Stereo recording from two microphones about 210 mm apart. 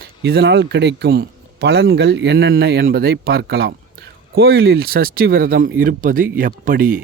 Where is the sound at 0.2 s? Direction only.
50° right (ahead or behind).